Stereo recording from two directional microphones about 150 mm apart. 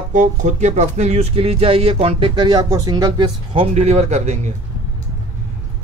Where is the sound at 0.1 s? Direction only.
55° right (ahead or behind); by 3.6 s 30° right (ahead or behind).